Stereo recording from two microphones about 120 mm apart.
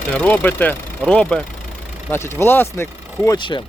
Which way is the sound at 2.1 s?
20° left (ahead or behind).